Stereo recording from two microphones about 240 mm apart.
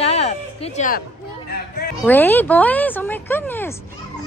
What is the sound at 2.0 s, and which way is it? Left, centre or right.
Speech, centre.